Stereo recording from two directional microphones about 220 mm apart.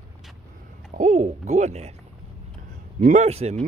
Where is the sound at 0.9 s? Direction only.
35° right (ahead or behind).